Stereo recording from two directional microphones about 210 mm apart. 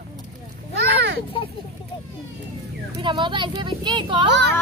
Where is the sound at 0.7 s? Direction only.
55° right (ahead or behind).